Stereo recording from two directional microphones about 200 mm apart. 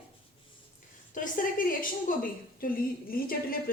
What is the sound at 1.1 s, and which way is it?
A woman's voice, 40° left (ahead or behind).